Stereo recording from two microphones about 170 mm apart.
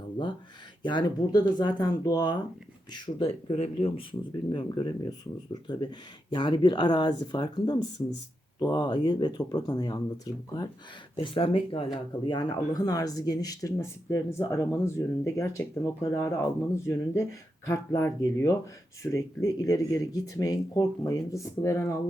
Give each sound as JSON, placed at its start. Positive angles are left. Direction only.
{"t": 0.8, "sound": "speech", "side_deg": 25}